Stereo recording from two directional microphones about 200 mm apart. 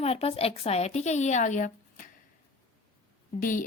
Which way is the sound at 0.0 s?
30° left (ahead or behind).